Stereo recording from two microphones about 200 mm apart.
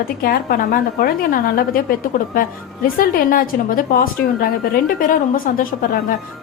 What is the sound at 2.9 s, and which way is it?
A woman's voice, 45° left (ahead or behind).